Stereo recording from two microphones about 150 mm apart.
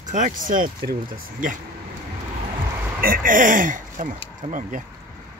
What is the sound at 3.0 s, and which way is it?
Speech, 65° right (ahead or behind).